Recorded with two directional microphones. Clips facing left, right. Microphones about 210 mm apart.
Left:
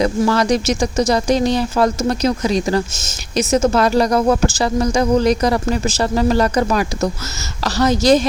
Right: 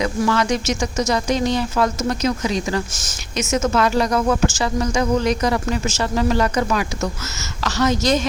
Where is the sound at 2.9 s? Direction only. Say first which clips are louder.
Left 6 dB; 25° left (ahead or behind).